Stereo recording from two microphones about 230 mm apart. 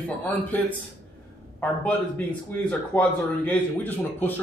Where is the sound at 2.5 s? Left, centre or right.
Centre.